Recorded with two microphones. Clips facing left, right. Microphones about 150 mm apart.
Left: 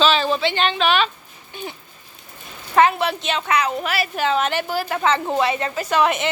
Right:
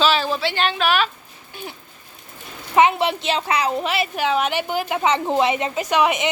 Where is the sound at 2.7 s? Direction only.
20° right (ahead or behind).